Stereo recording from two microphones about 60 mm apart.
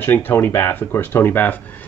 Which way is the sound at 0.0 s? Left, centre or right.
Left.